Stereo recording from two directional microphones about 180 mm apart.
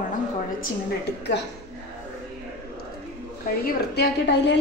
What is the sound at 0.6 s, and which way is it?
Speech, 65° left (ahead or behind).